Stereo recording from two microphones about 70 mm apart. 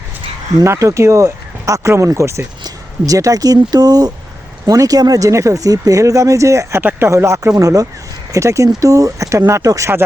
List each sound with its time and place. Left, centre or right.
0.6 s speech: right